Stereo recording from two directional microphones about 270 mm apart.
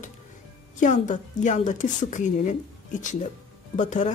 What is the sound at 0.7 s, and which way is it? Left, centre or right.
Speech, left.